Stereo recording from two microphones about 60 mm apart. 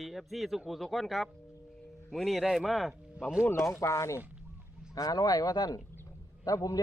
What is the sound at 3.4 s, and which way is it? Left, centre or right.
Speech, left.